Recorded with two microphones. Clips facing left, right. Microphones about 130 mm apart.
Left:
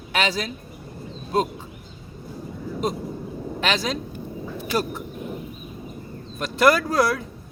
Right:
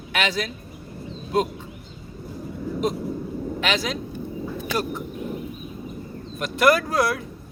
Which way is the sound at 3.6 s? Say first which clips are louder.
Left 2 dB; 40° left (ahead or behind).